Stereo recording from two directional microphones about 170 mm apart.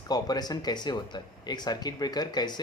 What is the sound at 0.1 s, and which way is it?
Speech, 25° left (ahead or behind).